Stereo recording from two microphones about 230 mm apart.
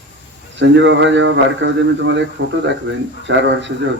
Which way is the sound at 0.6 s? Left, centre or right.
Right.